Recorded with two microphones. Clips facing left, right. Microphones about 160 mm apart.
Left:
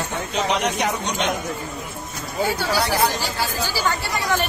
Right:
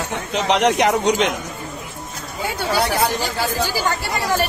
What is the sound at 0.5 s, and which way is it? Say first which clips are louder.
Speech: right 6 dB; 80° right.